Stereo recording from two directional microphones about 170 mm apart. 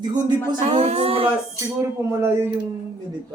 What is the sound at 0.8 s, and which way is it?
Speech, 40° right (ahead or behind).